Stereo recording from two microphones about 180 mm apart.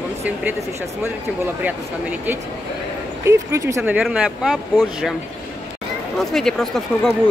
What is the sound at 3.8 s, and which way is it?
Speech, 5° right (ahead or behind).